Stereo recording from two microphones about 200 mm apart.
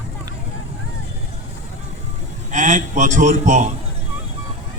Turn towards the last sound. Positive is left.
turn(degrees=-35)  # may be behind; listen again after turning